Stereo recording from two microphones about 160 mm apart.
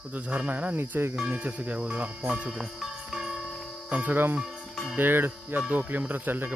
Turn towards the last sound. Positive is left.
turn(degrees=-10)  # may be behind; listen again after turning